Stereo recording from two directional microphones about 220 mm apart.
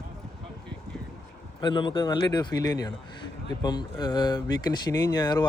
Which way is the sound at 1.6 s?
20° left (ahead or behind).